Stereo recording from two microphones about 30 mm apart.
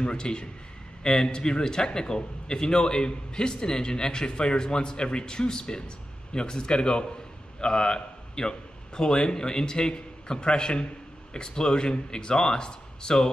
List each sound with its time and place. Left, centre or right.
0.0 s a man's voice: left